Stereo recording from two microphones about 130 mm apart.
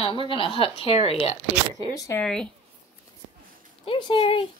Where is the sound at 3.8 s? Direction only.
40° left (ahead or behind).